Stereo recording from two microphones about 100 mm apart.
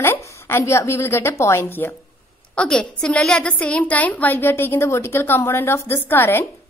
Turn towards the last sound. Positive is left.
turn(degrees=20)  # may be behind; listen again after turning